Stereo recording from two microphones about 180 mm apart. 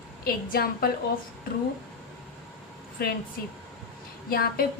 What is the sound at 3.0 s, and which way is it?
Speech, 60° left (ahead or behind).